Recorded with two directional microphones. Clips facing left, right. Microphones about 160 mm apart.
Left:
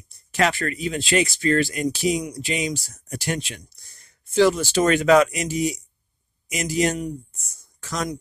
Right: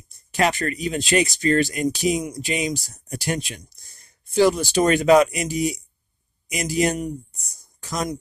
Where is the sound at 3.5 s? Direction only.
15° right (ahead or behind).